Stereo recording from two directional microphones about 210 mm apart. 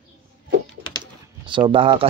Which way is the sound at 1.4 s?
20° right (ahead or behind).